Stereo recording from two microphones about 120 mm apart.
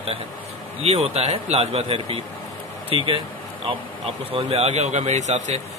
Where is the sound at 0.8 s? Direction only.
60° right (ahead or behind).